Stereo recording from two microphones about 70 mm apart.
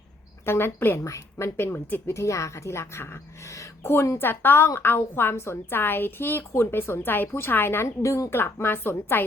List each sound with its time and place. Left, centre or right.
0.4 s a woman's voice: left
0.9 s a woman's voice: left
8.0 s speech: left
8.3 s a woman's voice: left